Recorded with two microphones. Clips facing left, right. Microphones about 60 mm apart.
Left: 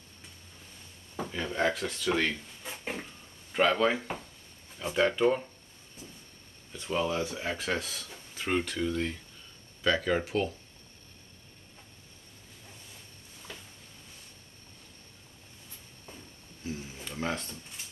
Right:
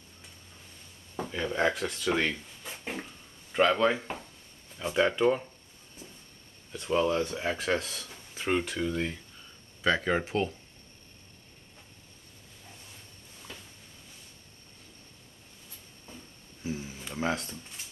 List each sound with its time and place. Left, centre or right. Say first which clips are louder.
1.3 s speech: right 2 dB; centre
3.5 s speech: right 1 dB; centre
6.7 s speech: right 4 dB; centre
10.2 s speech: even; right
16.6 s a sound: right 2 dB; centre